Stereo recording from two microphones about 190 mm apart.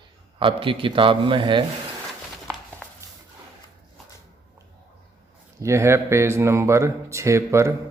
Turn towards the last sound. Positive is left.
turn(degrees=-15)  # may be behind; listen again after turning